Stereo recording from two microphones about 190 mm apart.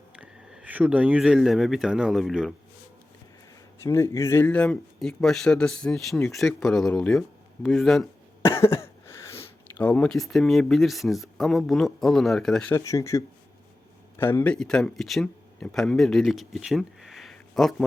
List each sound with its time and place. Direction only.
0.2 s speech: 5° right (ahead or behind)
3.8 s speech: 15° left (ahead or behind)
8.4 s speech: 15° left (ahead or behind)
12.7 s speech: 15° left (ahead or behind)